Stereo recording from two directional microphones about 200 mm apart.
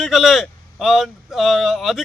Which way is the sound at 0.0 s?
Centre (ahead or behind).